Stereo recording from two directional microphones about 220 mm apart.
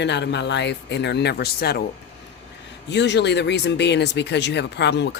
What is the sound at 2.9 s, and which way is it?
Speech, 50° left (ahead or behind).